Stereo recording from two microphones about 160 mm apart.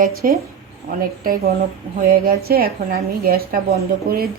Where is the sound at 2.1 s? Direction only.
70° right (ahead or behind).